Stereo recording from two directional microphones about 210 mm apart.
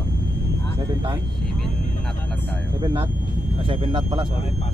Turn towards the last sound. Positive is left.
turn(degrees=-25)  # may be behind; listen again after turning